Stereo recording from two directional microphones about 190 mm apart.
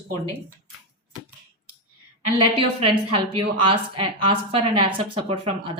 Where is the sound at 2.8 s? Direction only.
30° right (ahead or behind).